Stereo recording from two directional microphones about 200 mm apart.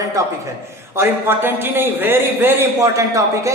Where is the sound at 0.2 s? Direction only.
15° right (ahead or behind).